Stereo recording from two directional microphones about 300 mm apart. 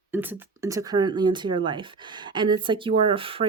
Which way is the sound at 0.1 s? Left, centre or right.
Centre.